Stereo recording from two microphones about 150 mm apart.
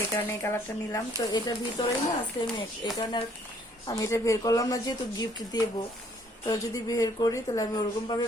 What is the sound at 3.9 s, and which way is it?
A woman's voice, 20° left (ahead or behind).